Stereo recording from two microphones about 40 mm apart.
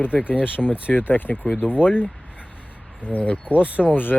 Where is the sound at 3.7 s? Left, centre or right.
Left.